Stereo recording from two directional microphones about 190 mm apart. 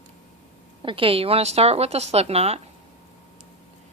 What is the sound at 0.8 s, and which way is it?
A woman's voice, 25° right (ahead or behind).